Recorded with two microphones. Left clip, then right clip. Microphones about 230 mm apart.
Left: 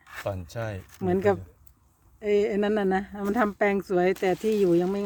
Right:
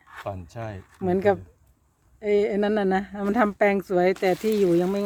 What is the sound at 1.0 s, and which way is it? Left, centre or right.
Speech, centre.